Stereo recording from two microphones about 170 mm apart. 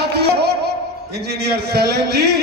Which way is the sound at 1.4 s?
70° right (ahead or behind).